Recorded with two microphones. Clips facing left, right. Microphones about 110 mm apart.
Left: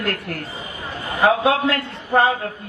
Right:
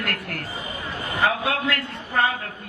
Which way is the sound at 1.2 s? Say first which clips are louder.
Left 7 dB; 30° left (ahead or behind).